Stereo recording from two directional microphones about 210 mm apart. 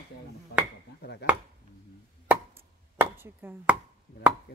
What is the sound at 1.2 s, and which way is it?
Speech, 50° left (ahead or behind).